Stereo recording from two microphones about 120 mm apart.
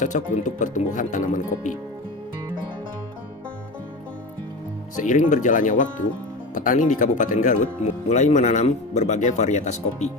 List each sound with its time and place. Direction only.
0.0 s speech: 90° left
4.9 s speech: 90° left; by 10.1 s 75° left (ahead or behind)